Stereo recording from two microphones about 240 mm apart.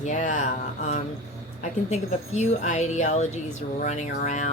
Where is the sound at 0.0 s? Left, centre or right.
Left.